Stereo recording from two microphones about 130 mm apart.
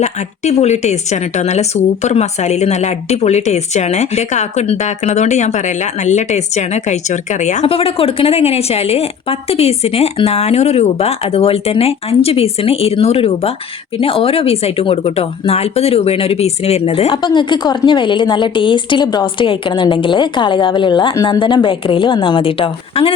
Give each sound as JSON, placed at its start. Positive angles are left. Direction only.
{"t": 0.0, "sound": "speech", "side_deg": 60}